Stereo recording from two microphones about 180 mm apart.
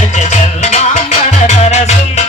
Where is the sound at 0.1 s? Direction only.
40° left (ahead or behind).